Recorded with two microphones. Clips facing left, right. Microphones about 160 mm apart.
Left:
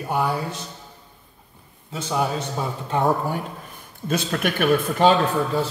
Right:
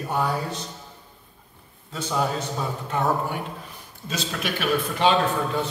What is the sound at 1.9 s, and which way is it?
Speech, 15° left (ahead or behind).